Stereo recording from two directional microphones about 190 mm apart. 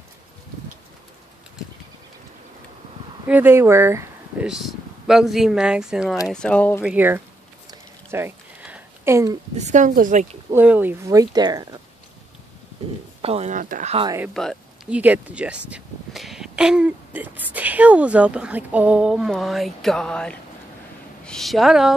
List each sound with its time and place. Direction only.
3.3 s speech: 10° right (ahead or behind)
4.5 s speech: centre (ahead or behind)
6.8 s speech: 10° right (ahead or behind)
7.7 s a sound: 10° right (ahead or behind)
9.6 s speech: 40° right (ahead or behind)
10.5 s speech: 10° right (ahead or behind)
13.2 s speech: 35° right (ahead or behind)
14.3 s a woman's voice: centre (ahead or behind)